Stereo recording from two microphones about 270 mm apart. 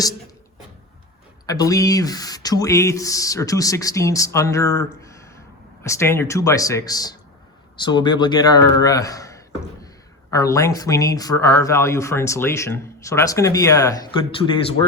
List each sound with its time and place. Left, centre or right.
1.5 s speech: centre
5.0 s a sound: centre
5.8 s speech: centre